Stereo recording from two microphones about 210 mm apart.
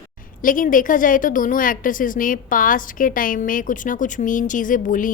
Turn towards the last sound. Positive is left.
turn(degrees=40)  # may be behind; listen again after turning